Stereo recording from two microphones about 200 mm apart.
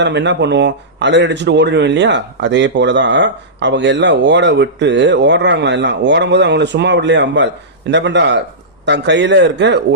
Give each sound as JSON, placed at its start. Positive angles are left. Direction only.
{"t": 0.0, "sound": "a man's voice", "side_deg": -60}